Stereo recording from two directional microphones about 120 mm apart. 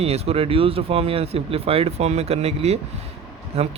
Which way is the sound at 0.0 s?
55° right (ahead or behind).